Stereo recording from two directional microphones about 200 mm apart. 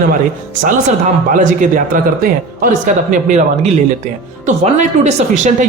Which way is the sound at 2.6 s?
40° right (ahead or behind).